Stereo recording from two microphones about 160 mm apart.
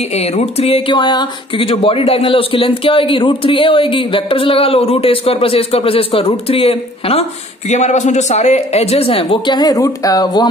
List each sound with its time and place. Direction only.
0.1 s speech: 40° left (ahead or behind); by 10.5 s 25° left (ahead or behind)